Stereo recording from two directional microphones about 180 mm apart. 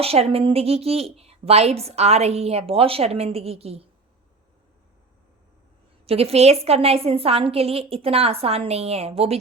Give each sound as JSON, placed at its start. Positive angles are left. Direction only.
{"t": 0.0, "sound": "a woman's voice", "side_deg": -35}
{"t": 6.1, "sound": "a woman's voice", "side_deg": -35}